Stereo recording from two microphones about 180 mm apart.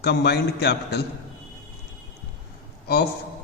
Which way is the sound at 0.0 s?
65° left (ahead or behind).